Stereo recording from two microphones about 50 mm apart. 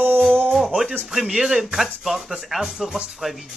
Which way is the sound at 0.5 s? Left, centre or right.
Centre.